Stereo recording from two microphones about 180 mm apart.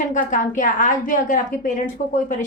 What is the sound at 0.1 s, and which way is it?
A woman's voice, 45° left (ahead or behind).